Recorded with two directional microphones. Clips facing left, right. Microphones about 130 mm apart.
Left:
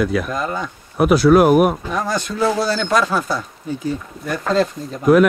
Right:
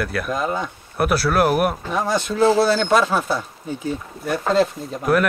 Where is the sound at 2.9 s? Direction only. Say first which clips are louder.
Even; 10° right (ahead or behind).